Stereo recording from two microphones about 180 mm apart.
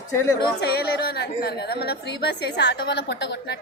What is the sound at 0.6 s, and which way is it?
A woman's voice, 65° left (ahead or behind).